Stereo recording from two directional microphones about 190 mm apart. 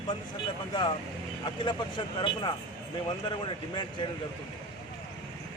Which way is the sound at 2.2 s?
25° left (ahead or behind).